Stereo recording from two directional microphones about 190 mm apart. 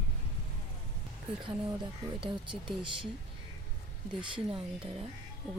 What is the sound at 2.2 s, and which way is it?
Speech, 25° right (ahead or behind).